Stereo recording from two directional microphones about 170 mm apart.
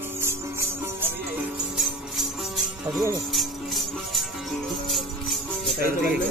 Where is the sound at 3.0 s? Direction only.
20° right (ahead or behind).